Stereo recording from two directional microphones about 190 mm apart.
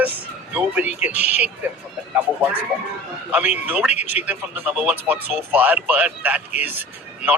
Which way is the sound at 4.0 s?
35° left (ahead or behind).